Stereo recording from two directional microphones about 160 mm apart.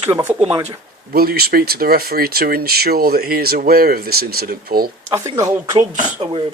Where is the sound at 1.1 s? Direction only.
70° right (ahead or behind).